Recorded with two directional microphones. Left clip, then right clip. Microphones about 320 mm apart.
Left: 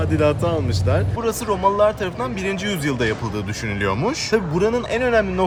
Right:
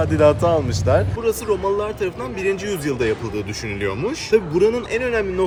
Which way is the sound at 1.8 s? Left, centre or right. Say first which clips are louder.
Left 5 dB; centre.